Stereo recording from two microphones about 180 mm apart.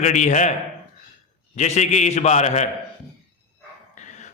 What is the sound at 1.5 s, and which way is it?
A man's voice, 40° left (ahead or behind).